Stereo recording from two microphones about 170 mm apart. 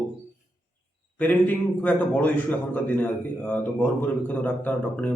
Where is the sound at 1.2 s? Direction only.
10° left (ahead or behind).